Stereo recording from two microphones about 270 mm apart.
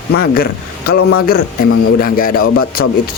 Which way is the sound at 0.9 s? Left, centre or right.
Left.